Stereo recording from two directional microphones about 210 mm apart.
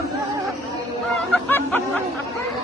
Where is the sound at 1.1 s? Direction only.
5° left (ahead or behind).